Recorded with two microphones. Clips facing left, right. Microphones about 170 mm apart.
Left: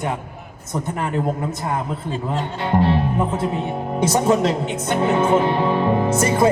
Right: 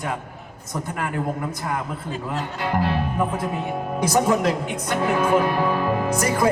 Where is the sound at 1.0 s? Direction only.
25° left (ahead or behind).